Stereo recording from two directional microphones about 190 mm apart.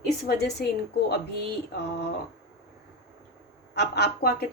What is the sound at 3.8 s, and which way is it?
Speech, 60° left (ahead or behind).